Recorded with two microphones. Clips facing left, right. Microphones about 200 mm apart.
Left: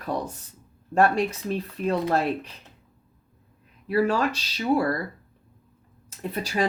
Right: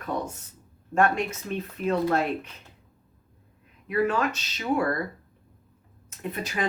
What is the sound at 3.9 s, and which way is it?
Speech, 35° left (ahead or behind).